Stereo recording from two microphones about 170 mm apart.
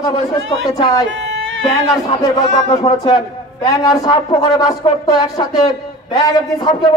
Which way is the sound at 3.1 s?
20° left (ahead or behind).